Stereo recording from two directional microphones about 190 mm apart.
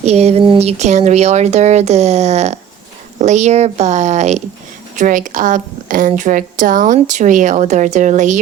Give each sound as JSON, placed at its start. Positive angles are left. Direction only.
{"t": 0.0, "sound": "a woman's voice", "side_deg": -35}